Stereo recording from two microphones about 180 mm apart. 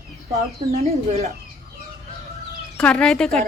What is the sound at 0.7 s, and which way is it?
Speech, 35° right (ahead or behind).